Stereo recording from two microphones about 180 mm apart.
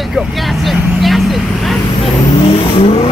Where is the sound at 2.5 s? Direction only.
35° left (ahead or behind).